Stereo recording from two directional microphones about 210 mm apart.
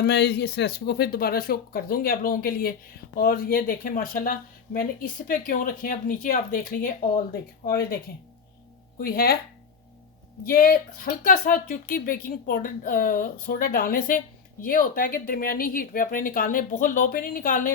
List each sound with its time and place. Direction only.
0.0 s speech: 55° left (ahead or behind)
9.0 s speech: 45° left (ahead or behind)
10.4 s speech: 45° left (ahead or behind)